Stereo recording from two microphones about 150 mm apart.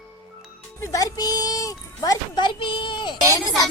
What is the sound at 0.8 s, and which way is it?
Speech, 20° left (ahead or behind).